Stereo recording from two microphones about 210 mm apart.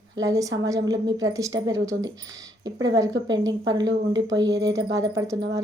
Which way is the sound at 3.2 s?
20° right (ahead or behind).